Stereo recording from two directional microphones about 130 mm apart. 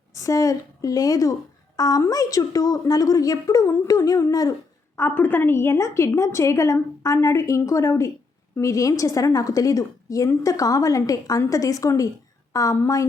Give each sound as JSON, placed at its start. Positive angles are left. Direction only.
{"t": 0.1, "sound": "a woman's voice", "side_deg": 25}
{"t": 4.9, "sound": "a woman's voice", "side_deg": 15}